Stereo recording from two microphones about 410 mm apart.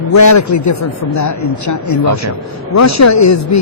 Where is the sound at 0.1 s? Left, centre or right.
Left.